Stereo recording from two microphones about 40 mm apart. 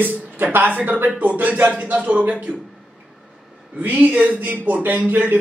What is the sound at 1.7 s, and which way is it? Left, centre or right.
Speech, right.